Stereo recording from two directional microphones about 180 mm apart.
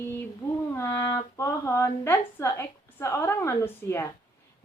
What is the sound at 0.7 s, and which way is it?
A woman's voice, 15° left (ahead or behind).